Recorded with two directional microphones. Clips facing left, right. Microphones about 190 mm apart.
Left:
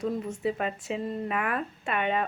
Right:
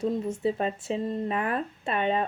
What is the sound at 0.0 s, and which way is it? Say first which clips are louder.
Speech: right 2 dB; 30° right (ahead or behind).